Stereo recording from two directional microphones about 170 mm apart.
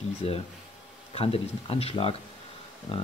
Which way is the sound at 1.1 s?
35° left (ahead or behind).